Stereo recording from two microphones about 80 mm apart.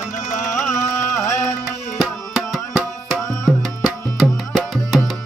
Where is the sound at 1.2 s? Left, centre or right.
Left.